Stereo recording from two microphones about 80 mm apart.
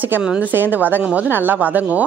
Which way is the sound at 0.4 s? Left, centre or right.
Right.